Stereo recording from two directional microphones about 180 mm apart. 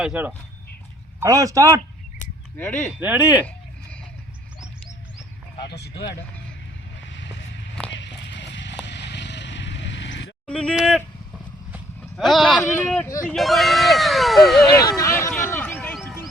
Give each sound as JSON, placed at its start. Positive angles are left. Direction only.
{"t": 0.0, "sound": "a man's voice", "side_deg": -10}
{"t": 2.6, "sound": "speech", "side_deg": 10}
{"t": 3.0, "sound": "a man's voice", "side_deg": -10}
{"t": 5.6, "sound": "speech", "side_deg": 65}
{"t": 7.9, "sound": "clip-clop", "side_deg": 80}
{"t": 8.8, "sound": "vehicle", "side_deg": 75}
{"t": 10.4, "sound": "speech", "side_deg": 5}
{"t": 12.1, "sound": "speech", "side_deg": 0}
{"t": 14.7, "sound": "a sound", "side_deg": 20}